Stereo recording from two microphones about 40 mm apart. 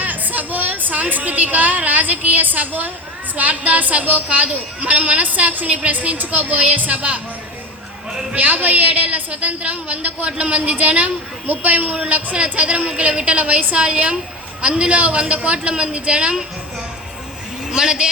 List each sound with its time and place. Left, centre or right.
0.0 s a woman's voice: right
8.4 s a woman's voice: right
17.7 s a man's voice: centre